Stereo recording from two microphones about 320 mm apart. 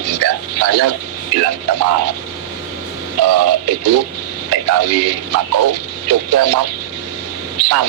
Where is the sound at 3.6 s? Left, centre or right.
Right.